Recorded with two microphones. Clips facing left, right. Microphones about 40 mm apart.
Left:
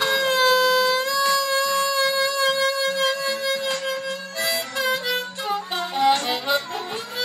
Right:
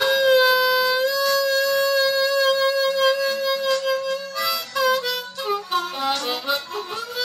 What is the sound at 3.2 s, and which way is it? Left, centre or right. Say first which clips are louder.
Music: right 3 dB; left.